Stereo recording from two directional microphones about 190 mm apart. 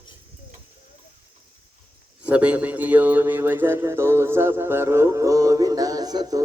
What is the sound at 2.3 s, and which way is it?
Speech, 5° right (ahead or behind).